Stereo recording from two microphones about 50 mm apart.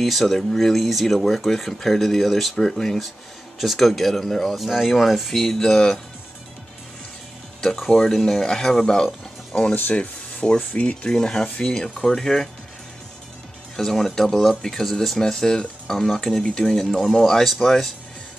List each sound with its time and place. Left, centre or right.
0.0 s speech: centre
7.6 s speech: centre; by 11.1 s left
11.1 s speech: centre
13.7 s speech: centre